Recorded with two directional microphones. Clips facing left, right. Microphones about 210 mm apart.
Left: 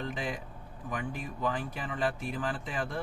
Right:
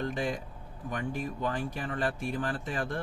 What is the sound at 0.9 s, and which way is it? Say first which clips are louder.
A man's voice: right 3 dB; 45° right (ahead or behind).